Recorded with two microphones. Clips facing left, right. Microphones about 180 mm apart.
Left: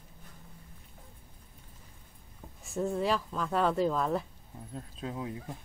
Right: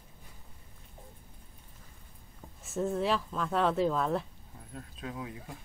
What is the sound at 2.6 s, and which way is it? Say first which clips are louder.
Speech: even; centre (ahead or behind).